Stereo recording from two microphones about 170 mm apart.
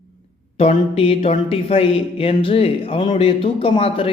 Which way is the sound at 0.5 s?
35° left (ahead or behind).